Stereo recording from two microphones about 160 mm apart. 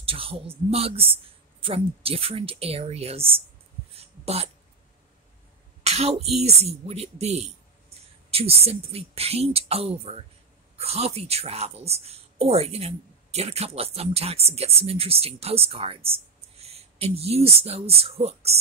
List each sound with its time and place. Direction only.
0.0 s a woman's voice: 35° right (ahead or behind)
3.9 s a sound: 40° right (ahead or behind)
5.9 s a woman's voice: 40° right (ahead or behind)